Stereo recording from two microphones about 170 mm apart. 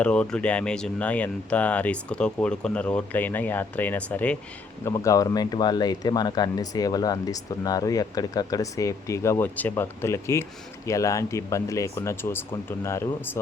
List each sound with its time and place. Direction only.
0.0 s speech: 5° left (ahead or behind)
4.9 s speech: 20° left (ahead or behind)